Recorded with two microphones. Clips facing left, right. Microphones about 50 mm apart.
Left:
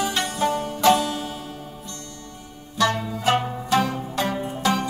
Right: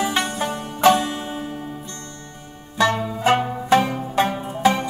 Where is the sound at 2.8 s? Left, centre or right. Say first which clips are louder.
Right 3 dB; right.